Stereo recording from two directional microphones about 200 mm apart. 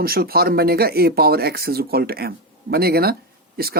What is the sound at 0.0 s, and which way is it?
Speech, 50° right (ahead or behind).